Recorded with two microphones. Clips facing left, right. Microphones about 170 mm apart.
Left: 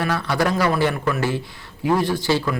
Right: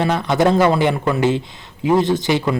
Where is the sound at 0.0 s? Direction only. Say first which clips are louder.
Right 5 dB; 20° right (ahead or behind).